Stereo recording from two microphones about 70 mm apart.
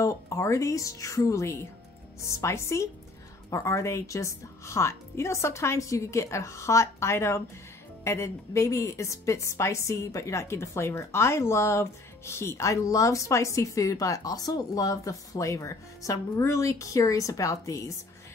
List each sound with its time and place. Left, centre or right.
0.0 s a woman's voice: left